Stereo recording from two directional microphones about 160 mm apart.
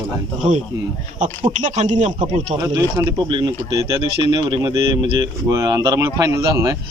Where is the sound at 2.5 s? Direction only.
20° right (ahead or behind).